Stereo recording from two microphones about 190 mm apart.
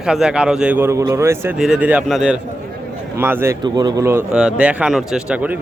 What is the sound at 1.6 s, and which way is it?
Speech, 5° right (ahead or behind).